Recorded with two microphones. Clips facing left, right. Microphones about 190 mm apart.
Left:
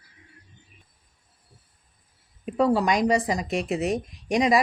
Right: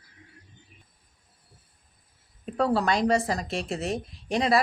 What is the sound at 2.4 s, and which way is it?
A woman's voice, 10° left (ahead or behind).